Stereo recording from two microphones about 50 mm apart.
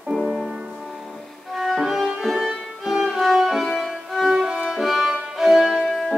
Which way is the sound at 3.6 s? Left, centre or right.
Centre.